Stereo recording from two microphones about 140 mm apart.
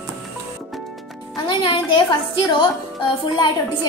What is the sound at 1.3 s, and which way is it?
A woman's voice, 35° left (ahead or behind).